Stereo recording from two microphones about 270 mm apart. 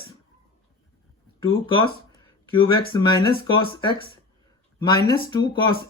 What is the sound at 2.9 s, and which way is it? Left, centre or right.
Speech, centre.